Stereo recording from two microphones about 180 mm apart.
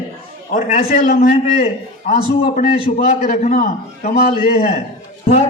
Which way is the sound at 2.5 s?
45° left (ahead or behind).